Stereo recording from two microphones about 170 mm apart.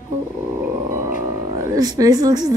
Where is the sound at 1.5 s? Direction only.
20° right (ahead or behind).